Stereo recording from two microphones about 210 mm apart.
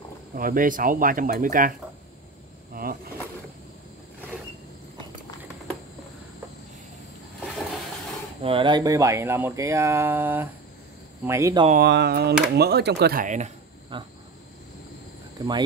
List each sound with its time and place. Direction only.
0.3 s speech: 40° right (ahead or behind)
2.7 s vehicle: 45° right (ahead or behind)
8.4 s speech: 25° right (ahead or behind)
11.7 s speech: 50° right (ahead or behind); by 13.5 s 35° right (ahead or behind)
13.9 s a sound: 25° right (ahead or behind)
15.3 s speech: 20° right (ahead or behind)